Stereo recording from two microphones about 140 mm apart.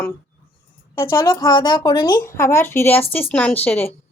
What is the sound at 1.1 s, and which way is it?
A woman's voice, 20° left (ahead or behind).